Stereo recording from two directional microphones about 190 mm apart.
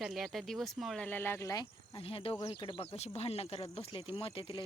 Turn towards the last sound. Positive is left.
turn(degrees=30)  # may be behind; listen again after turning